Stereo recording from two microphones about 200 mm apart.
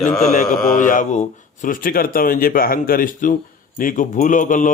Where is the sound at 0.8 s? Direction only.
40° left (ahead or behind).